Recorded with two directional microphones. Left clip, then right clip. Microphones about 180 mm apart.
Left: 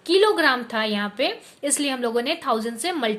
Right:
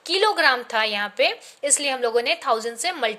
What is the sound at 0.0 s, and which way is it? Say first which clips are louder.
A woman's voice: left 1 dB; 20° right (ahead or behind).